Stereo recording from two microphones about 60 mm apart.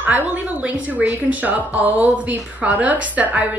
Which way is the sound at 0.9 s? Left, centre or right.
Right.